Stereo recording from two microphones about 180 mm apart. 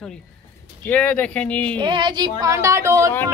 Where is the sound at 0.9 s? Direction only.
10° left (ahead or behind).